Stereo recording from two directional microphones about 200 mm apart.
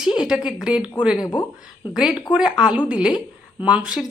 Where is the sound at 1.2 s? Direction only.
20° left (ahead or behind).